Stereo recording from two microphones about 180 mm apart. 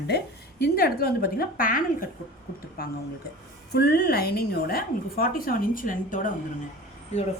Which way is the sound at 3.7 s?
65° left (ahead or behind).